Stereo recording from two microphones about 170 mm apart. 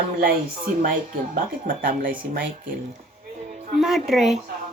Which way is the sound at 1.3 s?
55° right (ahead or behind).